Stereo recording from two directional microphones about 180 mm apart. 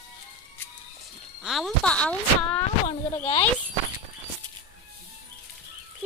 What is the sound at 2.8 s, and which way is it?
Speech, 35° left (ahead or behind).